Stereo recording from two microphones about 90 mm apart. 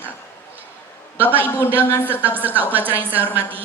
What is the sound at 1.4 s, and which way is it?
Speech, 20° left (ahead or behind).